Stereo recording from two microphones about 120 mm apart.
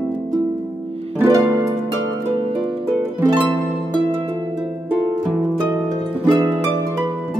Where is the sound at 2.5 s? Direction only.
50° right (ahead or behind).